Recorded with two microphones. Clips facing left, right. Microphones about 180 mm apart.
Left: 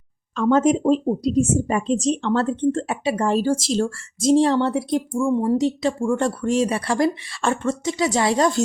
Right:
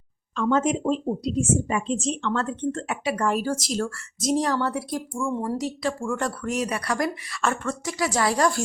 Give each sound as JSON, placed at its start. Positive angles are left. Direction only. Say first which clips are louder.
{"t": 0.3, "sound": "speech", "louder": "left 5 dB", "side_deg": 40}